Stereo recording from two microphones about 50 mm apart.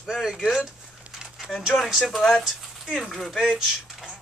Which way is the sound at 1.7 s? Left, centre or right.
Centre.